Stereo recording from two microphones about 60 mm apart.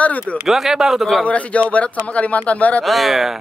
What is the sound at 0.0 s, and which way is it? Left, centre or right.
Speech, left.